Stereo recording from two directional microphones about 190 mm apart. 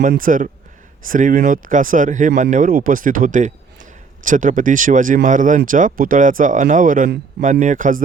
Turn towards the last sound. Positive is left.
turn(degrees=-45)  # may be behind; listen again after turning